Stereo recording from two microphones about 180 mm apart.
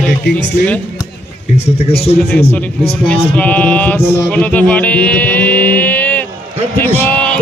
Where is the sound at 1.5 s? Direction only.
35° left (ahead or behind).